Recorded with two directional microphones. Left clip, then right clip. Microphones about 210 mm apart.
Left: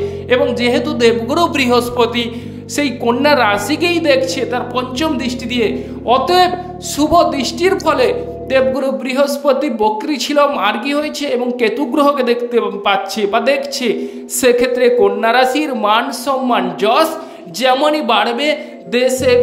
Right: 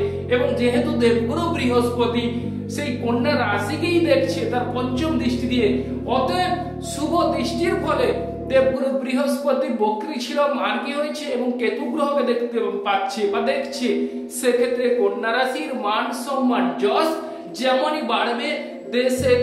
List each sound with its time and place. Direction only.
0.3 s a woman's voice: 45° left (ahead or behind)